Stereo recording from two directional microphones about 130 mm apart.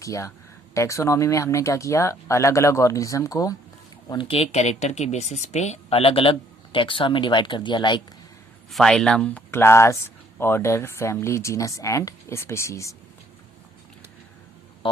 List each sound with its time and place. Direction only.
0.0 s speech: 25° left (ahead or behind)
4.1 s speech: 40° left (ahead or behind)
8.7 s speech: 5° left (ahead or behind); by 13.0 s 25° left (ahead or behind)